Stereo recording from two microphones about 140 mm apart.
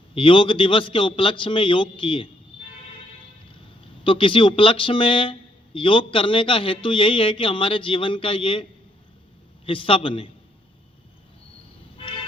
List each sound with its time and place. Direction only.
0.1 s speech: 40° left (ahead or behind)
4.0 s speech: 40° left (ahead or behind)
9.6 s speech: 40° left (ahead or behind)